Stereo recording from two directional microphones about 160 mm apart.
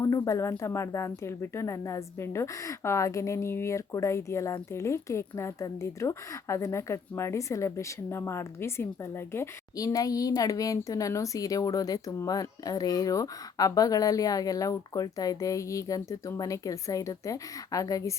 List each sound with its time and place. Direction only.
0.0 s speech: 20° left (ahead or behind)